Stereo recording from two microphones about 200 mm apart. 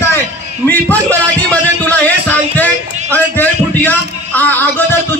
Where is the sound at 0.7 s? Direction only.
10° left (ahead or behind).